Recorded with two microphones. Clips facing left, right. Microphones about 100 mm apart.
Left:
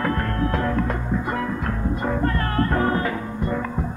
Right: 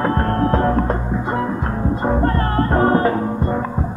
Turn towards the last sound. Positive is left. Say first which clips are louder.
# right 6 dB
turn(degrees=-35)  # may be behind; listen again after turning